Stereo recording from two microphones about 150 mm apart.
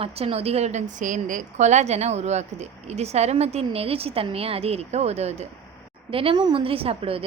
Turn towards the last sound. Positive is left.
turn(degrees=-40)  # may be behind; listen again after turning